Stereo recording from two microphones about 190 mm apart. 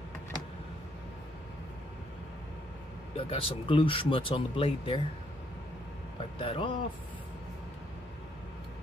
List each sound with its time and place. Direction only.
3.2 s speech: 30° left (ahead or behind)
6.3 s speech: 30° left (ahead or behind)